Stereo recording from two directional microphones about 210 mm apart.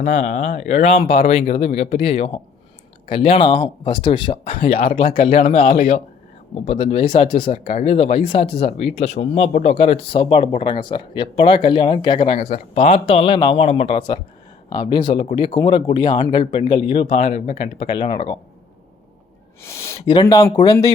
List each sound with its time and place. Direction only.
0.0 s speech: 35° left (ahead or behind)
4.7 s speech: 45° left (ahead or behind)
5.1 s speech: 30° left (ahead or behind)
5.6 s speech: 45° left (ahead or behind)
6.7 s speech: 30° left (ahead or behind)
19.6 s speech: 10° left (ahead or behind)